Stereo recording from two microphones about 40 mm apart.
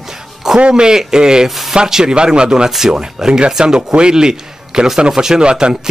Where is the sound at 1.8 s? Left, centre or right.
Centre.